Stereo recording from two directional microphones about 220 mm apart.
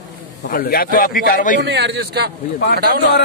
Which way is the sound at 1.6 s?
50° right (ahead or behind).